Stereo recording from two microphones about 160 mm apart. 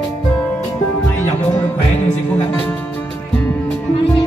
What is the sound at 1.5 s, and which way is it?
Music, 40° left (ahead or behind).